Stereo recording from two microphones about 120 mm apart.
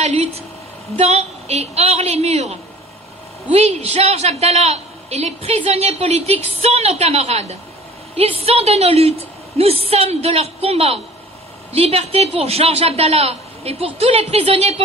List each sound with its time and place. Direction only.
0.0 s a woman's voice: 65° right (ahead or behind)